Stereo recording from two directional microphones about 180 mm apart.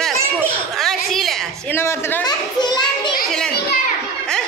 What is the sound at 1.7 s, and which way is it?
Children playing, 15° left (ahead or behind).